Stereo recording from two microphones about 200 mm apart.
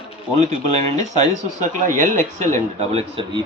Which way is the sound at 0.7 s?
35° right (ahead or behind).